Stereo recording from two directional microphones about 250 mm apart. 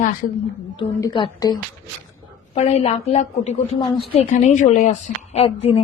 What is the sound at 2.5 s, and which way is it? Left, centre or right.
A woman's voice, left.